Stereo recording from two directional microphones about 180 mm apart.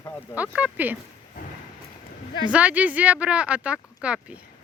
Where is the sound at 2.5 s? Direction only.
5° right (ahead or behind).